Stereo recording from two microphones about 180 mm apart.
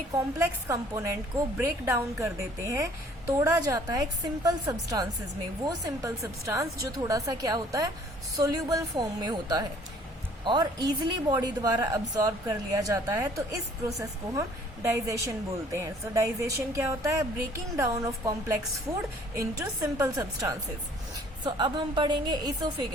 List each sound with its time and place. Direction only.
0.1 s speech: 15° right (ahead or behind)